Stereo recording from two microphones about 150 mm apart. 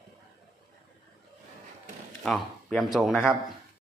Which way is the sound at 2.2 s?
5° left (ahead or behind).